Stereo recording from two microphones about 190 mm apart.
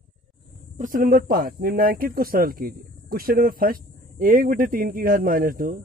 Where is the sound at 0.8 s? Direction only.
45° right (ahead or behind).